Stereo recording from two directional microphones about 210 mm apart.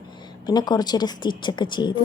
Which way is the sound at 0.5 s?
20° left (ahead or behind).